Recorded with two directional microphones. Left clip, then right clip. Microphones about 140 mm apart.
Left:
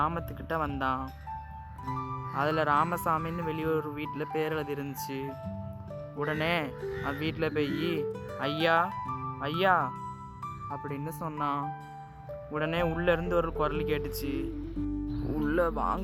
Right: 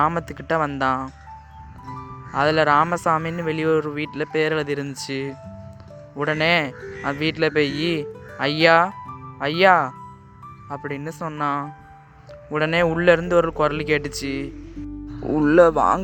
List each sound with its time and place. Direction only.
0.0 s speech: 30° right (ahead or behind)
1.9 s speech: centre (ahead or behind)
2.3 s speech: 25° right (ahead or behind)
8.9 s music: centre (ahead or behind)
9.4 s speech: 25° right (ahead or behind)